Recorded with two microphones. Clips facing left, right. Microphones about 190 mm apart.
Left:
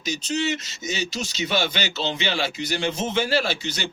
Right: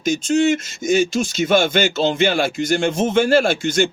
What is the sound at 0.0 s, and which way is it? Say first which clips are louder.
Speech: right 9 dB; 50° right (ahead or behind).